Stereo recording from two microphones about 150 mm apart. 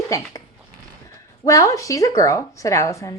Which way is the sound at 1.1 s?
20° left (ahead or behind).